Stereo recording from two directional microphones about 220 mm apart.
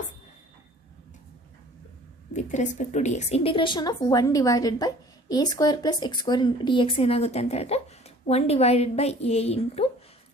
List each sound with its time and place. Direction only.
2.3 s a woman's voice: 30° left (ahead or behind)